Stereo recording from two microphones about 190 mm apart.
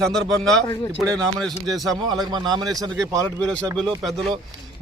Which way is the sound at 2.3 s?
20° right (ahead or behind).